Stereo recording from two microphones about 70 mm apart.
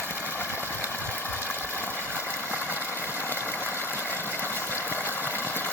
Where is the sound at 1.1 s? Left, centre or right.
Left.